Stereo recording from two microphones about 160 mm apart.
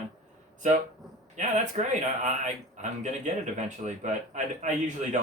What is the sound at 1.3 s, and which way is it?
Speech, 50° right (ahead or behind).